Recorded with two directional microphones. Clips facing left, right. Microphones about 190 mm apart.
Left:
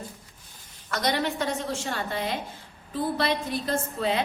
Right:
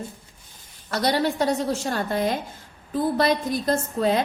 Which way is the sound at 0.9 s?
35° right (ahead or behind).